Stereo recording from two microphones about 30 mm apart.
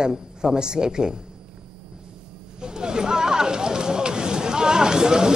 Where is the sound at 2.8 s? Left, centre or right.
Right.